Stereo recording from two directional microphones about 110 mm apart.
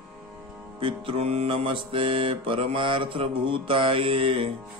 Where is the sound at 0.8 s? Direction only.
55° right (ahead or behind).